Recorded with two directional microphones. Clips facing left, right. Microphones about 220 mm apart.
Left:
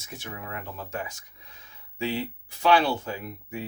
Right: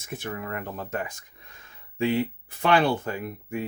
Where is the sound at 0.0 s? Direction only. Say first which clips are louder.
Right 6 dB; 55° right (ahead or behind).